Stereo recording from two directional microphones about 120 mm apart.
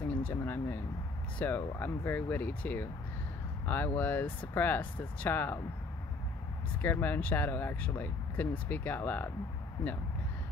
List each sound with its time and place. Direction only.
0.3 s speech: 20° left (ahead or behind)
6.8 s speech: 15° left (ahead or behind)